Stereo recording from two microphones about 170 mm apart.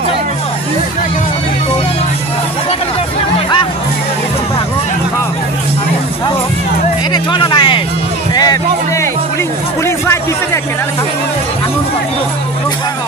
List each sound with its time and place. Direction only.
3.3 s music: 25° left (ahead or behind)
7.1 s a sound: 25° left (ahead or behind)
8.4 s music: 20° left (ahead or behind)